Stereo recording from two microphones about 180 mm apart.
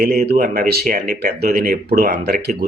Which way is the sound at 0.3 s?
55° right (ahead or behind).